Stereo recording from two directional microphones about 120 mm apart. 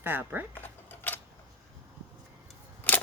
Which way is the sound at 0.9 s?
15° left (ahead or behind).